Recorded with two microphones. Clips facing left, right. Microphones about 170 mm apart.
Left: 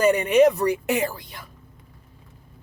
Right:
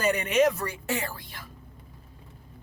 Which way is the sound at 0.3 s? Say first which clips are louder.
Left 6 dB; 15° left (ahead or behind).